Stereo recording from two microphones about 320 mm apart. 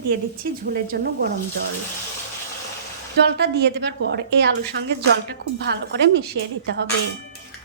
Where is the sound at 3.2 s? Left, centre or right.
Right.